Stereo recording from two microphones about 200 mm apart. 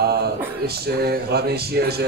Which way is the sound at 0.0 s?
55° right (ahead or behind).